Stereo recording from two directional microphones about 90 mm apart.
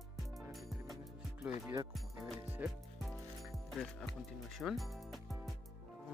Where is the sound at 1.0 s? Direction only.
40° right (ahead or behind).